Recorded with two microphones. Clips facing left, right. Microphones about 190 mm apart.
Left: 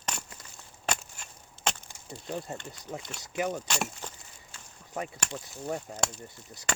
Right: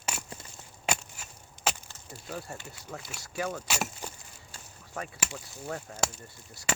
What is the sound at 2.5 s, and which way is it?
Speech, 5° right (ahead or behind).